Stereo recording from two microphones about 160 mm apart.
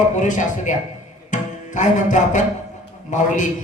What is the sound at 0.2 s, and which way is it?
Speech, 50° left (ahead or behind).